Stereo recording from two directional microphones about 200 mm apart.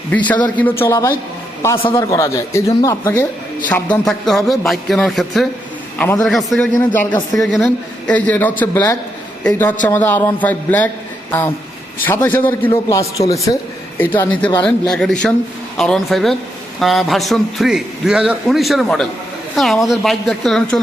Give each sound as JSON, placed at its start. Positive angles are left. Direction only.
{"t": 0.5, "sound": "a man's voice", "side_deg": 10}
{"t": 4.0, "sound": "a man's voice", "side_deg": 0}